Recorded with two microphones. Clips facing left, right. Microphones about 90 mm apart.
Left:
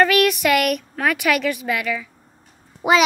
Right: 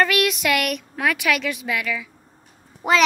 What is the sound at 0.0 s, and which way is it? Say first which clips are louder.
A woman's voice: left 4 dB; centre (ahead or behind).